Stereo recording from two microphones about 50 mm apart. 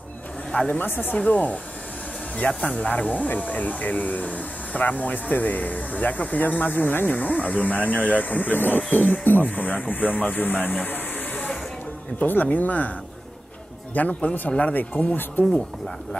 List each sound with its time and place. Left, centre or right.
0.7 s speech: left
1.1 s speech: left
13.9 s speech: left
15.4 s speech: left